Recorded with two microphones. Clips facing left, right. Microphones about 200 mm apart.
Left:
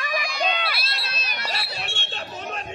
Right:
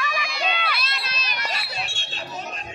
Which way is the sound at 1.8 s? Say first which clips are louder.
Left 1 dB; 65° left (ahead or behind).